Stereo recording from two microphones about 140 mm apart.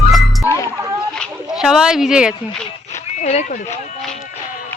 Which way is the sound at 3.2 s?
55° left (ahead or behind).